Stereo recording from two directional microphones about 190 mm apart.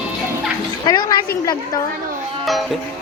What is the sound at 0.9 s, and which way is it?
Speech, 20° left (ahead or behind).